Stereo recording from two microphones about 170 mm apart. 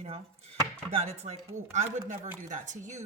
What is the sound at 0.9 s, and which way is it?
Chopping, 40° right (ahead or behind).